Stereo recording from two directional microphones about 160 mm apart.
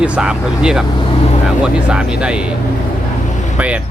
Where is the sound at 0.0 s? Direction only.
5° right (ahead or behind).